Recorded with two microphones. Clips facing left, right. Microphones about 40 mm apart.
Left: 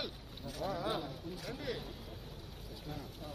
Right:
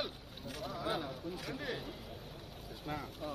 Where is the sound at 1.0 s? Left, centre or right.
Right.